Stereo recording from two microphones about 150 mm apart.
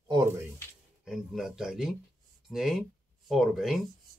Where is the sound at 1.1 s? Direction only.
5° right (ahead or behind).